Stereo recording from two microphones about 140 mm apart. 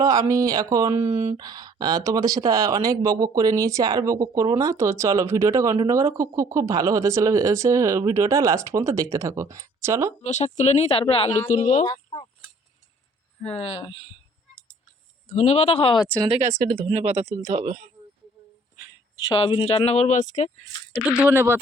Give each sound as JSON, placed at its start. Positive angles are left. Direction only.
{"t": 0.0, "sound": "speech", "side_deg": -25}
{"t": 1.1, "sound": "speech", "side_deg": -50}
{"t": 1.4, "sound": "speech", "side_deg": -30}
{"t": 10.2, "sound": "speech", "side_deg": 55}
{"t": 11.5, "sound": "a woman's voice", "side_deg": 60}
{"t": 11.8, "sound": "fowl", "side_deg": 35}
{"t": 13.6, "sound": "speech", "side_deg": 50}
{"t": 15.3, "sound": "speech", "side_deg": 50}
{"t": 16.4, "sound": "speech", "side_deg": -75}
{"t": 16.9, "sound": "speech", "side_deg": -50}
{"t": 19.1, "sound": "speech", "side_deg": 35}
{"t": 20.9, "sound": "speech", "side_deg": -5}